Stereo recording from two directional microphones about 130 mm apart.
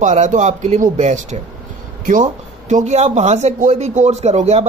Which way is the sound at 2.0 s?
80° right.